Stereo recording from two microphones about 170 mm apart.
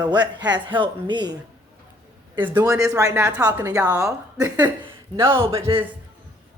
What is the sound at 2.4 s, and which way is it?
Speech, 15° right (ahead or behind).